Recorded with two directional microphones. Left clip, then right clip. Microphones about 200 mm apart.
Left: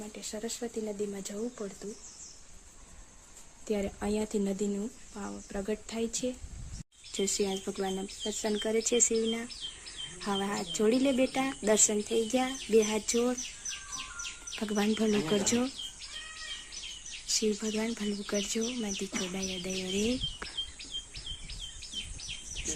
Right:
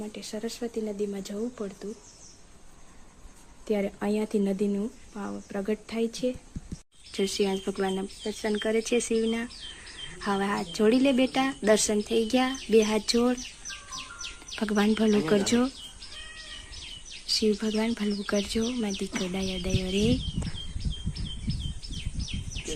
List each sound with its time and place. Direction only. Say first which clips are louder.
0.1 s speech: right 3 dB; centre (ahead or behind)
3.7 s speech: right 4 dB; centre (ahead or behind)
8.3 s speech: right 3 dB; 20° left (ahead or behind)
8.5 s speech: right 2 dB; 5° left (ahead or behind)
14.5 s speech: right 5 dB; centre (ahead or behind)
17.2 s speech: right 5 dB; centre (ahead or behind)